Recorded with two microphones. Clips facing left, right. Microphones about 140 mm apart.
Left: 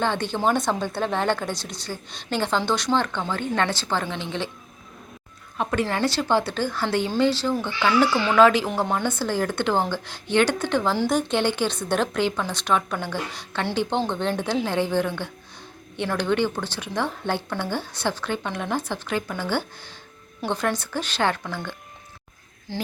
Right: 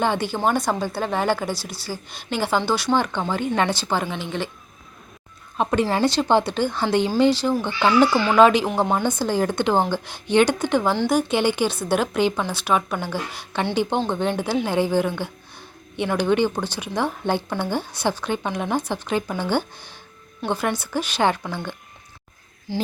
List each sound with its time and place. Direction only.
0.0 s a woman's voice: 10° right (ahead or behind)
5.5 s a woman's voice: 25° right (ahead or behind)
8.7 s a woman's voice: 30° right (ahead or behind)
9.0 s a woman's voice: 15° right (ahead or behind)